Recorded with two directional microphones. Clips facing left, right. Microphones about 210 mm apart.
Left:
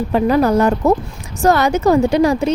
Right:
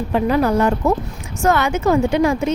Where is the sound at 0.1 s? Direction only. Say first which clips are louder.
Left 3 dB; 40° left (ahead or behind).